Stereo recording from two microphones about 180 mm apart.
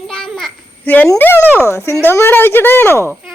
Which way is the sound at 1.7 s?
15° left (ahead or behind).